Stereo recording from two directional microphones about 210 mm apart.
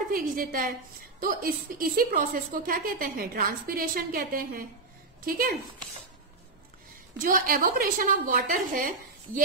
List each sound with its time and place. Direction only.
0.1 s a woman's voice: 45° right (ahead or behind)
7.2 s a woman's voice: 40° right (ahead or behind)